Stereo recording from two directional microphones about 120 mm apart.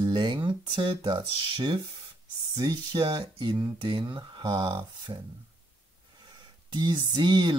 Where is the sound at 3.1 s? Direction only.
35° right (ahead or behind).